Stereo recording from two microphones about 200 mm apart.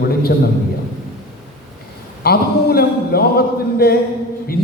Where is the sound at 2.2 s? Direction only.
50° left (ahead or behind).